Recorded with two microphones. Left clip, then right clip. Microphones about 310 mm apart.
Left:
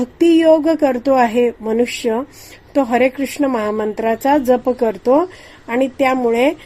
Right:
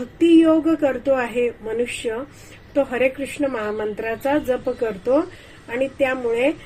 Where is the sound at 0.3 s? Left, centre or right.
Left.